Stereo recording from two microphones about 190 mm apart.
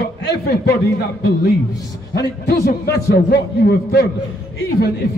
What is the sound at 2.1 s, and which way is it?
A man's voice, 60° left (ahead or behind).